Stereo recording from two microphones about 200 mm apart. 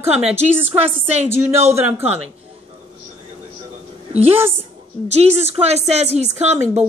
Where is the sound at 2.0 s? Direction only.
30° right (ahead or behind).